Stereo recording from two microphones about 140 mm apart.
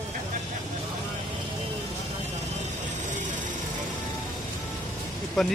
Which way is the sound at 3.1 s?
60° right (ahead or behind).